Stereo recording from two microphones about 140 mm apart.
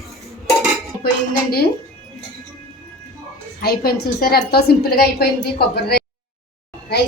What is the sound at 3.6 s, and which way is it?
A woman's voice, 90° left.